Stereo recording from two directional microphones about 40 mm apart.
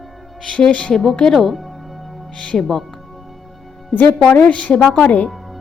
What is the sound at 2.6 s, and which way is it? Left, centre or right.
Music, centre.